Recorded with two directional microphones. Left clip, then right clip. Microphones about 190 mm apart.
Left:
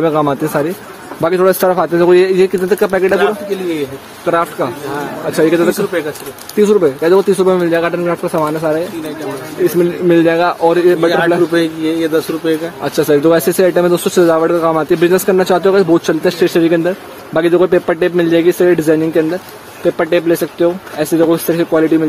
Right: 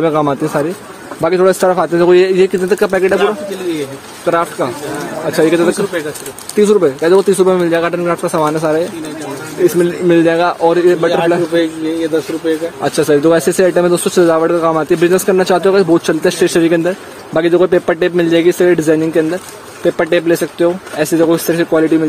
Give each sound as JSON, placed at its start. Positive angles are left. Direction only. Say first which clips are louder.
{"t": 0.0, "sound": "speech", "louder": "even", "side_deg": -10}
{"t": 4.3, "sound": "speech", "louder": "even", "side_deg": -5}
{"t": 11.5, "sound": "speech", "louder": "even", "side_deg": 45}
{"t": 12.8, "sound": "speech", "louder": "even", "side_deg": -10}